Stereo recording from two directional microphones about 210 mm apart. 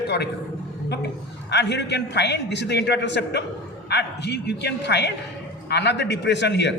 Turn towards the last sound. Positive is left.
turn(degrees=55)  # may be behind; listen again after turning